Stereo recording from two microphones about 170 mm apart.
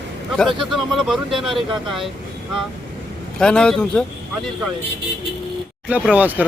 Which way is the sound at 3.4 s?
5° left (ahead or behind).